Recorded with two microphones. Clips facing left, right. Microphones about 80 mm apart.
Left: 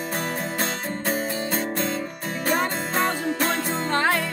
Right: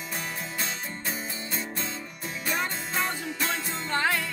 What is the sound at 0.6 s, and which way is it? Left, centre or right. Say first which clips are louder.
Music: left 7 dB; left.